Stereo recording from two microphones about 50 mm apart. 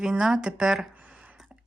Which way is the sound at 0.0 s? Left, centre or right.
Centre.